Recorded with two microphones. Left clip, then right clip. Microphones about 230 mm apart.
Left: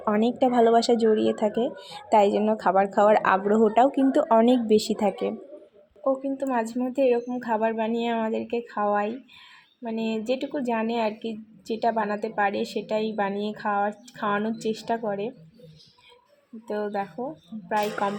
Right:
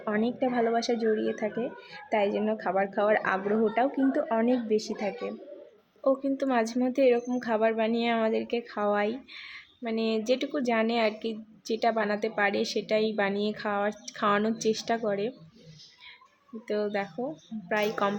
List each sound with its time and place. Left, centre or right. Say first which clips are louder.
0.0 s a woman's voice: left 6 dB; centre
6.1 s a woman's voice: left 1 dB; centre
16.6 s a woman's voice: left 1 dB; centre